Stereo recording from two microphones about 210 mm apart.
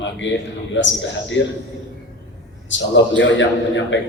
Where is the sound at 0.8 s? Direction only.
60° left (ahead or behind).